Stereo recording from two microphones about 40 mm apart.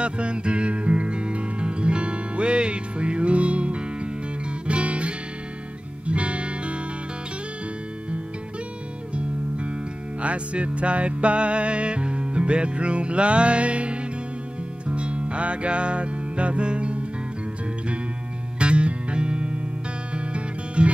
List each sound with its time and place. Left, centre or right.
0.0 s music: right
9.1 s music: right
18.6 s music: right